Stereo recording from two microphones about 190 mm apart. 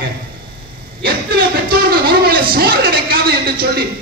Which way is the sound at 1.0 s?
55° right (ahead or behind).